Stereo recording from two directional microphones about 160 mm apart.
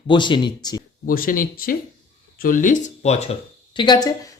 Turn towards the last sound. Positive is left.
turn(degrees=25)  # may be behind; listen again after turning